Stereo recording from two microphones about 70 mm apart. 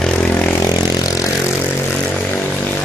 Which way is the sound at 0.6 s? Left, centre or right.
Left.